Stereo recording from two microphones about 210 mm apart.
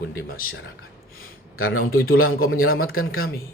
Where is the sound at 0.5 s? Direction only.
70° left (ahead or behind).